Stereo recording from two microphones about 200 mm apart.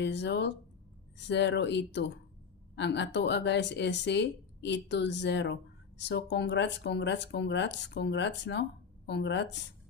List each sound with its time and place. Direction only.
0.0 s speech: 60° left (ahead or behind)